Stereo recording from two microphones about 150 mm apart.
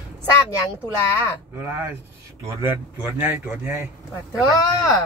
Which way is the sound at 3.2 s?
10° right (ahead or behind).